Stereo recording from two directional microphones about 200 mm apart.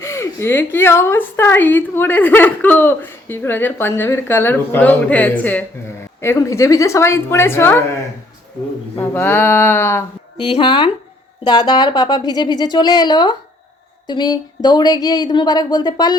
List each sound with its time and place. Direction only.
0.0 s a woman's voice: 15° left (ahead or behind)
9.0 s a woman's voice: 10° left (ahead or behind)
10.3 s speech: 25° left (ahead or behind)